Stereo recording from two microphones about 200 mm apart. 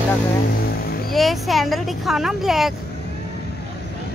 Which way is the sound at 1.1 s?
Centre (ahead or behind).